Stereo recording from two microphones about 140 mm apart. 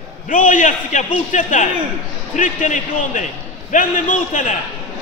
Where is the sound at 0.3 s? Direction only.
70° left (ahead or behind).